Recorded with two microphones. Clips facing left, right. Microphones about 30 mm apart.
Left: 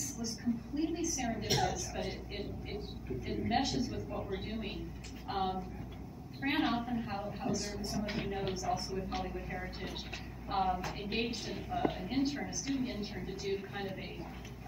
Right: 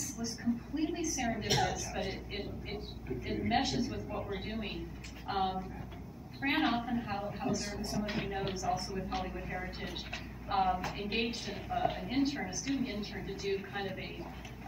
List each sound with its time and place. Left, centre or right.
0.7 s a woman's voice: centre
8.5 s speech: centre
9.1 s a woman's voice: centre